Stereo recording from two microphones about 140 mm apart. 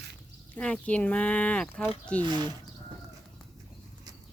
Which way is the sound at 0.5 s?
10° left (ahead or behind).